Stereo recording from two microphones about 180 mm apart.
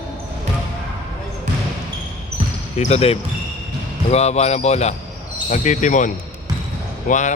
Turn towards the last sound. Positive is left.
turn(degrees=40)  # may be behind; listen again after turning